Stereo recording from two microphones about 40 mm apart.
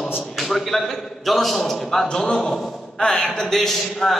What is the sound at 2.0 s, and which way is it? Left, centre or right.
Speech, centre.